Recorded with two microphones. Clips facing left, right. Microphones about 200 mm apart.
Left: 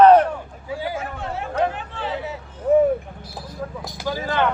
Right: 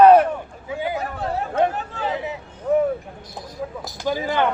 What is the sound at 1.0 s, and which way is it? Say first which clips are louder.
Chatter: right 3 dB; 40° right (ahead or behind).